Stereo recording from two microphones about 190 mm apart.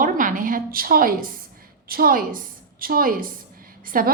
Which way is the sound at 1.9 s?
50° right (ahead or behind).